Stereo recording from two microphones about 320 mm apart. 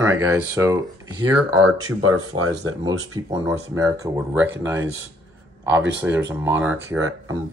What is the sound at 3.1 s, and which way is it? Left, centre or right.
Speech, centre.